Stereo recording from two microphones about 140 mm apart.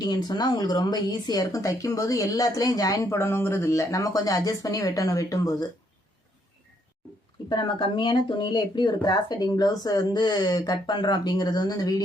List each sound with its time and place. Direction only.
0.0 s speech: 30° left (ahead or behind)
7.5 s speech: 35° left (ahead or behind)